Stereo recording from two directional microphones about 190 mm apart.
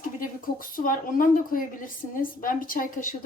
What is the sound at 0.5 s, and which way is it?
A woman's voice, 45° left (ahead or behind).